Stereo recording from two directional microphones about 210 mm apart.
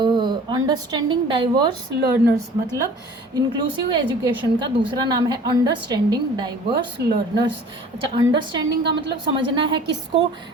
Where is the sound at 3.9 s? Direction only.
20° right (ahead or behind).